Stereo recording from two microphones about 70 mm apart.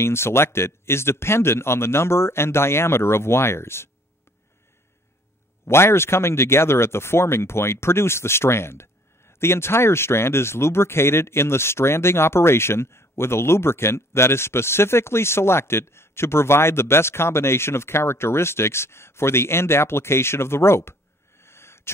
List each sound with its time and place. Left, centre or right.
0.0 s speech: left
5.7 s speech: left
21.4 s a sound: left